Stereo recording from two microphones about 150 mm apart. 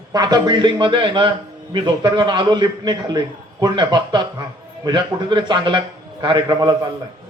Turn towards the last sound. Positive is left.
turn(degrees=-30)  # may be behind; listen again after turning